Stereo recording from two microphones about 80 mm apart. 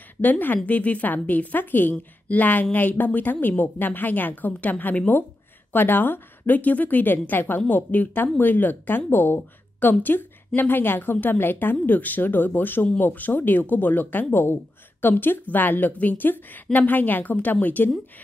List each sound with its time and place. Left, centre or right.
0.2 s a woman's voice: left